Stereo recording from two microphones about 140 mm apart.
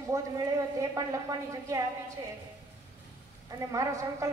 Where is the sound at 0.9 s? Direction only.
25° right (ahead or behind).